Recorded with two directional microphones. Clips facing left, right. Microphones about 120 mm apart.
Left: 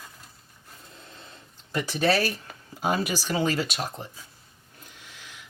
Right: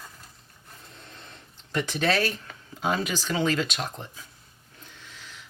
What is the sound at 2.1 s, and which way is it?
Speech, 5° left (ahead or behind).